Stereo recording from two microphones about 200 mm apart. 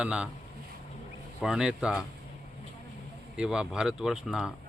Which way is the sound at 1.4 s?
5° right (ahead or behind).